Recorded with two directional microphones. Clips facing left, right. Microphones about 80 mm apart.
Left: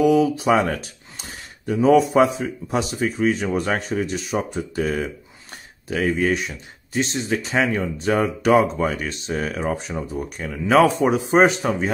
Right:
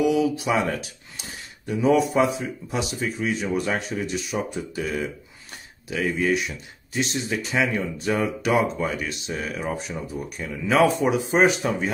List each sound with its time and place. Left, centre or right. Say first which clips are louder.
0.0 s speech: left 4 dB; left